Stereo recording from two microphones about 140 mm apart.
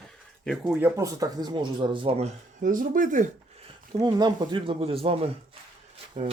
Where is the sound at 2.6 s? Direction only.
75° right (ahead or behind).